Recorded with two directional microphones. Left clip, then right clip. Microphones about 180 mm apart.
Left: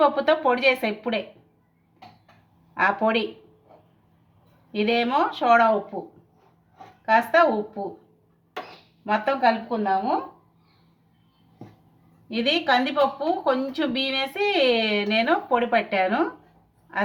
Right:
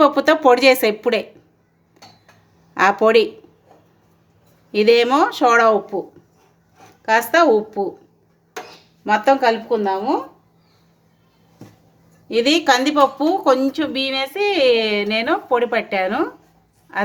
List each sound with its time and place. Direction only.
0.0 s speech: 75° right (ahead or behind)
2.7 s speech: 80° right
4.7 s speech: 90° right
9.0 s speech: 85° right
12.3 s speech: 90° right; by 16.2 s 70° right (ahead or behind)